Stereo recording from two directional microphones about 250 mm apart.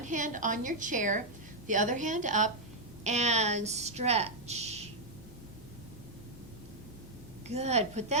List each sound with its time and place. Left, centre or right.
0.1 s a woman's voice: right
7.4 s a woman's voice: right